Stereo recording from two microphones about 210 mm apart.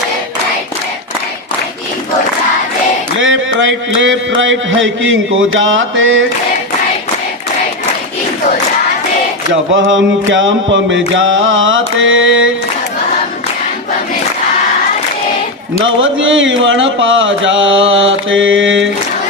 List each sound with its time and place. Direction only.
3.2 s mantra: 65° right (ahead or behind)
9.7 s mantra: 65° right (ahead or behind)
15.8 s speech: 65° right (ahead or behind)